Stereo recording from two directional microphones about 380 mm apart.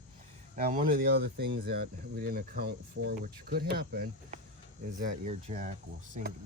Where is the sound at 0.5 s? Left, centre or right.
Right.